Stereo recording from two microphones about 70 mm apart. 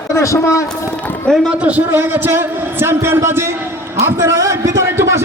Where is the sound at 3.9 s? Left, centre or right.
Right.